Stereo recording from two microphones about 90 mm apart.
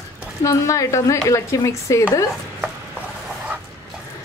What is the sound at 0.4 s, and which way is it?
Speech, 35° left (ahead or behind).